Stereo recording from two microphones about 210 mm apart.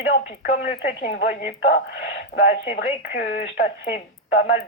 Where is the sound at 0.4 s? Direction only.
40° left (ahead or behind).